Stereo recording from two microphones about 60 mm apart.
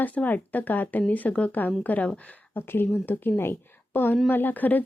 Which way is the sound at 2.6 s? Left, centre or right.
Left.